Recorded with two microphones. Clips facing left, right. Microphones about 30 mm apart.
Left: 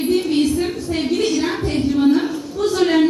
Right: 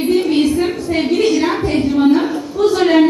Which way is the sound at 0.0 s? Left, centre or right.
Centre.